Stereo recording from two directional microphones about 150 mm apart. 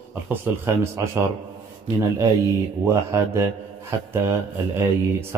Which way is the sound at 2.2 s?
20° right (ahead or behind).